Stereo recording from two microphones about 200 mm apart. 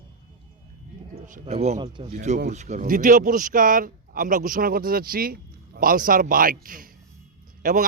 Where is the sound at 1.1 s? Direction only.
35° right (ahead or behind).